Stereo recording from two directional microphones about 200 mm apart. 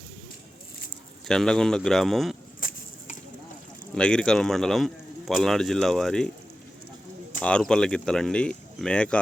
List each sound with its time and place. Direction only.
1.3 s speech: 5° left (ahead or behind)
2.6 s chicken: 40° left (ahead or behind)
3.9 s speech: 5° left (ahead or behind)
7.4 s speech: 5° left (ahead or behind)